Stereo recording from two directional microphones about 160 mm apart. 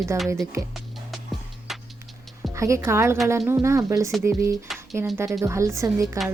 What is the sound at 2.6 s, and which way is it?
Speech, 20° right (ahead or behind).